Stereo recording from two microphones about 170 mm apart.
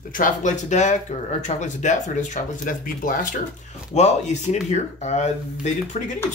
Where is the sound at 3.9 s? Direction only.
40° left (ahead or behind).